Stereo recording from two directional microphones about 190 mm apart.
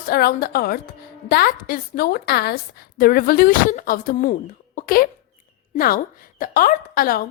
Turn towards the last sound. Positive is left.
turn(degrees=50)  # may be behind; listen again after turning